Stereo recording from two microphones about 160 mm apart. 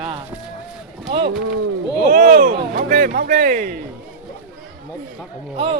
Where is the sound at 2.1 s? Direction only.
60° right (ahead or behind).